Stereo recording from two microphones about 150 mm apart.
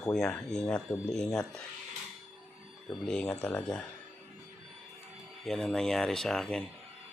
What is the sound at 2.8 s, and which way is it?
Speech, 5° left (ahead or behind).